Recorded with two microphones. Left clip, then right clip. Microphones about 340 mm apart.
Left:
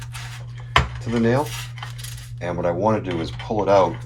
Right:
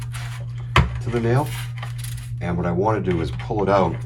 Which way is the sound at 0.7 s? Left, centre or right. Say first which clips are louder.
Left 1 dB; centre.